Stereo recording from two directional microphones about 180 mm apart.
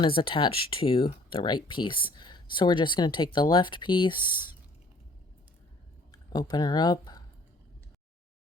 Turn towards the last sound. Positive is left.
turn(degrees=20)  # may be behind; listen again after turning